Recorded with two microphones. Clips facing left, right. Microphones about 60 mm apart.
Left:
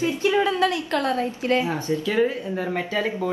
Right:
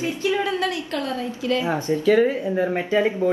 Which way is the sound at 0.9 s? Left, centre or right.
Left.